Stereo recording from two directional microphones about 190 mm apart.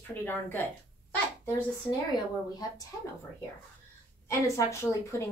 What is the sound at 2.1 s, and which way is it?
Speech, 20° left (ahead or behind).